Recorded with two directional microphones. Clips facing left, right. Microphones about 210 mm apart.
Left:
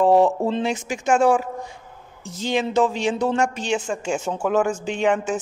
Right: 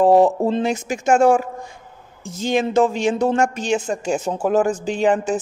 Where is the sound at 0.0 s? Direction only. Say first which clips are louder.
Right 3 dB; 35° right (ahead or behind).